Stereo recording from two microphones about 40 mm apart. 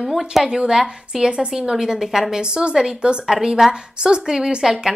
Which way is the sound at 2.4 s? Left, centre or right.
Right.